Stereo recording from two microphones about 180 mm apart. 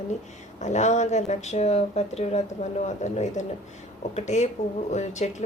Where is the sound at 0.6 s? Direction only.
40° left (ahead or behind).